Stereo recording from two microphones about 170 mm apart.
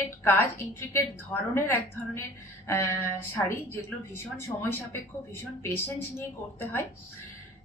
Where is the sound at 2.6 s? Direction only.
15° left (ahead or behind).